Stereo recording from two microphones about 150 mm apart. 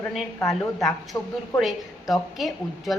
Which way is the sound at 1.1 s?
20° left (ahead or behind).